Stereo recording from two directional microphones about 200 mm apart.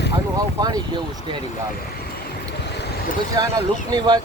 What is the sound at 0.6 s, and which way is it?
Speech, 20° right (ahead or behind).